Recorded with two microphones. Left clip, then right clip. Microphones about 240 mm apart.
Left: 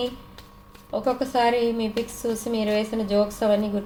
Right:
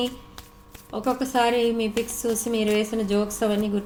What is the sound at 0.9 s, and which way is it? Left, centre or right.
A woman's voice, right.